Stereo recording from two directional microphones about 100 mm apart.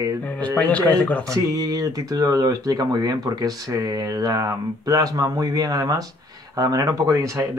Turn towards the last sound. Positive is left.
turn(degrees=-35)  # may be behind; listen again after turning